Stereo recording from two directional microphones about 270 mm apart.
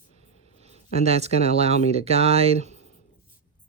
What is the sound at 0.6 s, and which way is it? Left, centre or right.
Speech, right.